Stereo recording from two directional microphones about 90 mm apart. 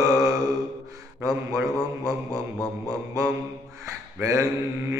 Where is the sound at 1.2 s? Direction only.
40° right (ahead or behind).